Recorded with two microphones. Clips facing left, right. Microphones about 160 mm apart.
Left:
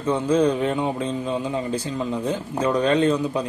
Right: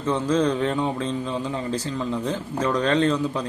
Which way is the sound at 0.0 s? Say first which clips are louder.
Left 2 dB; 15° left (ahead or behind).